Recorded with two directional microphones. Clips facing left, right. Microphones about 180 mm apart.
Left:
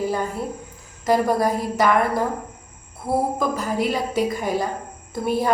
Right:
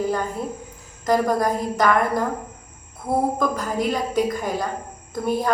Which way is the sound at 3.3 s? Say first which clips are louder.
Even; 5° left (ahead or behind).